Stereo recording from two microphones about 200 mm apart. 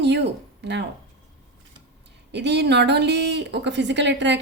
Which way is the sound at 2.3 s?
60° right (ahead or behind).